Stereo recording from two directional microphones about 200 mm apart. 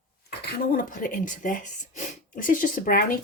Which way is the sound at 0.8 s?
45° left (ahead or behind).